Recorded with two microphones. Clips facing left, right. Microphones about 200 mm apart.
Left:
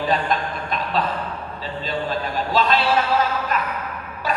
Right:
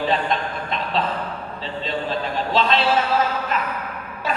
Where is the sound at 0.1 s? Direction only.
25° right (ahead or behind).